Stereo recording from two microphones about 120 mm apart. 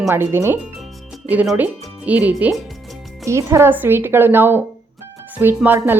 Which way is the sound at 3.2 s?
25° right (ahead or behind).